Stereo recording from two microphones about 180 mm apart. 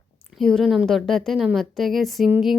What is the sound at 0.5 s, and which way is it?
A woman's voice, centre (ahead or behind).